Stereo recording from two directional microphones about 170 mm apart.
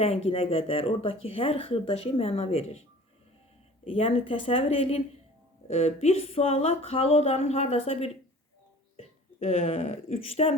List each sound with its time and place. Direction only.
0.3 s speech: 35° left (ahead or behind)
3.8 s speech: 35° left (ahead or behind)